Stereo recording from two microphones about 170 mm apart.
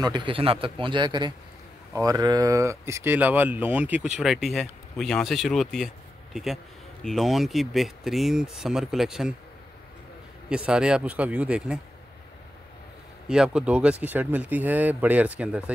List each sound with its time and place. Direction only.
0.0 s a man's voice: 25° right (ahead or behind); by 9.3 s centre (ahead or behind)
10.5 s speech: 5° right (ahead or behind)
13.3 s speech: 5° right (ahead or behind)